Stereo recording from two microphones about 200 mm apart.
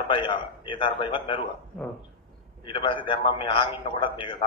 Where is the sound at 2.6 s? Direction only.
25° left (ahead or behind).